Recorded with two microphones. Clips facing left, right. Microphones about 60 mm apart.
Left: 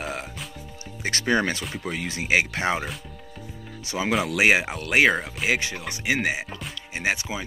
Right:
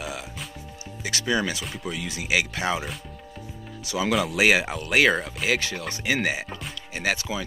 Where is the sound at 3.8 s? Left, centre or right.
Left.